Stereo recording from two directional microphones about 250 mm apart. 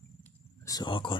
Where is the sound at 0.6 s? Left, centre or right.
Centre.